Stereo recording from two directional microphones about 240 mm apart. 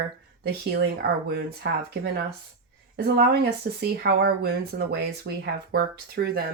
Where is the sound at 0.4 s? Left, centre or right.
Right.